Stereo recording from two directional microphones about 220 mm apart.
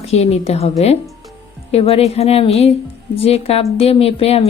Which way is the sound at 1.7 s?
30° left (ahead or behind).